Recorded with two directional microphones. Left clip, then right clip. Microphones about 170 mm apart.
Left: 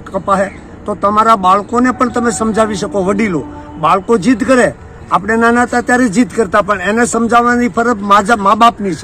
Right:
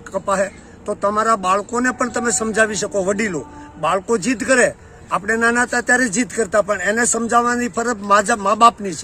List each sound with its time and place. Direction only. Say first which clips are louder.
0.1 s speech: left 6 dB; 10° right (ahead or behind)